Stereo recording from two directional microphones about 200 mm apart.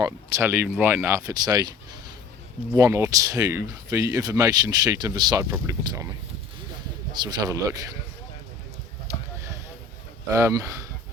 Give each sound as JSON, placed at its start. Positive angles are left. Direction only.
{"t": 0.0, "sound": "speech", "side_deg": -15}
{"t": 2.7, "sound": "speech", "side_deg": -15}
{"t": 7.1, "sound": "speech", "side_deg": -20}
{"t": 9.1, "sound": "a sound", "side_deg": -15}
{"t": 10.3, "sound": "speech", "side_deg": -15}